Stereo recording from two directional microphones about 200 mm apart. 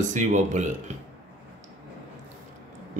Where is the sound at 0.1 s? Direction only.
35° right (ahead or behind).